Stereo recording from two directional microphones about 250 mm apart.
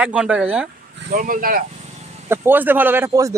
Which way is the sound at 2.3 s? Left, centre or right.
Centre.